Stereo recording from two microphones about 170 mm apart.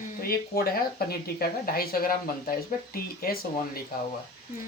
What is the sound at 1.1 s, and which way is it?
Speech, 60° left (ahead or behind).